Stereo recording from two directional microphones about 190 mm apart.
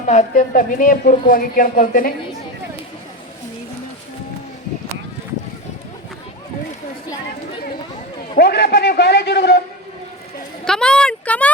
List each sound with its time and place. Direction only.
0.1 s a woman's voice: 40° left (ahead or behind)
8.4 s a man's voice: 60° left (ahead or behind)
10.7 s speech: 5° left (ahead or behind)